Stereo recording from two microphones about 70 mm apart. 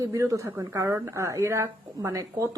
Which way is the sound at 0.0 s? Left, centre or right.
Right.